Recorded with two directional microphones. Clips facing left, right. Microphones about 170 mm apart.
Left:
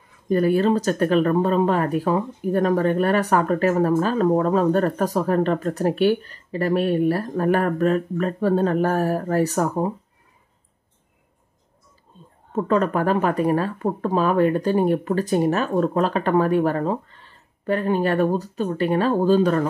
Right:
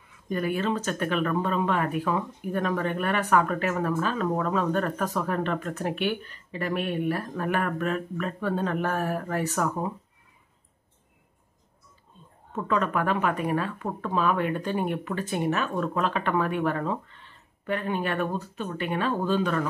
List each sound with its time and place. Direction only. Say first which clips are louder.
0.3 s speech: left 9 dB; 40° left (ahead or behind)
12.5 s speech: left 6 dB; 40° left (ahead or behind)